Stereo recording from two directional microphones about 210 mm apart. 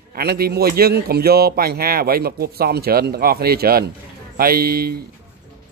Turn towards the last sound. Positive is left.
turn(degrees=-45)  # may be behind; listen again after turning